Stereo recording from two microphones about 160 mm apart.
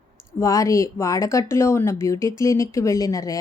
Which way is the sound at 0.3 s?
20° left (ahead or behind).